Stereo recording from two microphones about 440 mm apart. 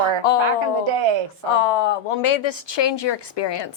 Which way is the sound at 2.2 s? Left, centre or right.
Left.